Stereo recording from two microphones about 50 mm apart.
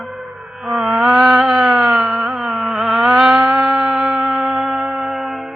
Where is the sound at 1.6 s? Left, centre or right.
Right.